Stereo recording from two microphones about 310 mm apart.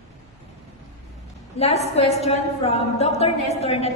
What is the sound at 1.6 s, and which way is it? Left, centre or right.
A woman's voice, centre.